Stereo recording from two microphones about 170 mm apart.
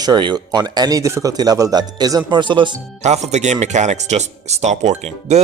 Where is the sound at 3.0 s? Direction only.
40° right (ahead or behind).